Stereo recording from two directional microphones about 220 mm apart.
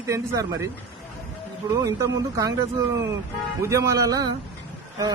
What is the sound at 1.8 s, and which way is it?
Speech, 15° right (ahead or behind).